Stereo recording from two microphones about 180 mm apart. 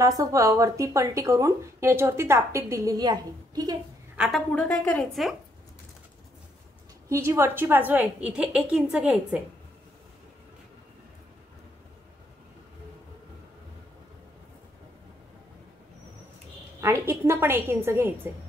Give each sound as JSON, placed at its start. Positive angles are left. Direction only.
{"t": 0.0, "sound": "speech", "side_deg": -20}
{"t": 4.2, "sound": "a woman's voice", "side_deg": 5}
{"t": 7.1, "sound": "a woman's voice", "side_deg": -15}
{"t": 16.8, "sound": "speech", "side_deg": -15}